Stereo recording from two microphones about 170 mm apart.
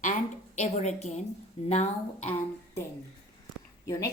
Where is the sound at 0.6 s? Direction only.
40° left (ahead or behind).